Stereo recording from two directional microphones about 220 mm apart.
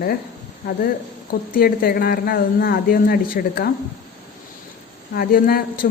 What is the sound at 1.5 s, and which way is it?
Speech, 40° left (ahead or behind).